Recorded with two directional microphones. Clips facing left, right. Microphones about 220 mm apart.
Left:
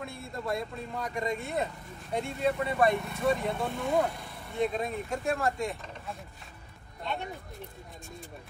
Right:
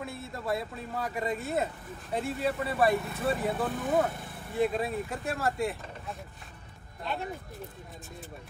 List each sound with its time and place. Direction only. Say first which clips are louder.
0.0 s speech: even; 5° right (ahead or behind)